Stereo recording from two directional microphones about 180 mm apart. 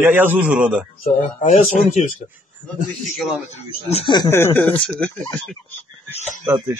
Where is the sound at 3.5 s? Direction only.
35° left (ahead or behind).